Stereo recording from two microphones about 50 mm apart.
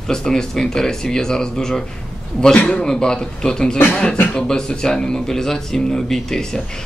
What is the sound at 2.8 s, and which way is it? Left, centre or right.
Speech, centre.